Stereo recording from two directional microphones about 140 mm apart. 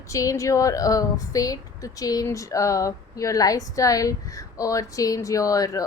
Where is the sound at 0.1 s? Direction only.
25° left (ahead or behind).